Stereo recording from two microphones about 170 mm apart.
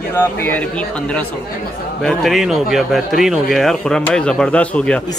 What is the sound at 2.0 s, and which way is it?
Speech, centre (ahead or behind).